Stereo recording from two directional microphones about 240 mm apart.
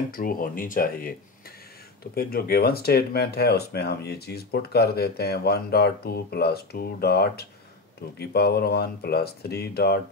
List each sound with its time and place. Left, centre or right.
0.1 s speech: left
2.1 s speech: left